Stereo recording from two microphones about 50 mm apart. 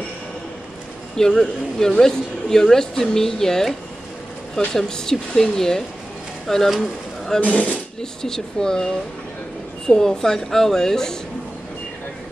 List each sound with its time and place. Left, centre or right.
1.1 s speech: centre
4.7 s speech: centre
7.3 s speech: left
8.0 s speech: centre